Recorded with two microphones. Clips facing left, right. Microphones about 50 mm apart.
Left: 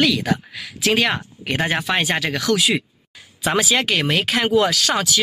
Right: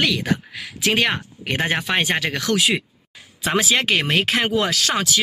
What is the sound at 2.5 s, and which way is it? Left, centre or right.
Speech, right.